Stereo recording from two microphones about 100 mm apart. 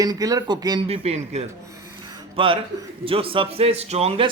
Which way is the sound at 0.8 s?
90° right.